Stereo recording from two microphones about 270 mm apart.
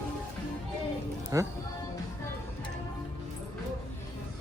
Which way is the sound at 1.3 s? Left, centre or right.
Centre.